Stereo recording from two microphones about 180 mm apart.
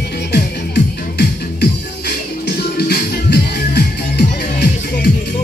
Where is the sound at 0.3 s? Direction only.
65° left (ahead or behind).